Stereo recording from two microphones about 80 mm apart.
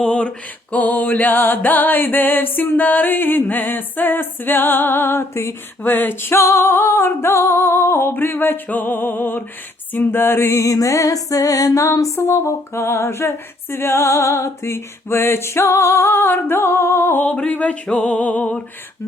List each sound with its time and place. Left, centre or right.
0.0 s music: centre; by 5.5 s left
5.8 s music: left